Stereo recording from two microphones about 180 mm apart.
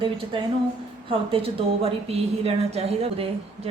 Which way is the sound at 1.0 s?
30° right (ahead or behind).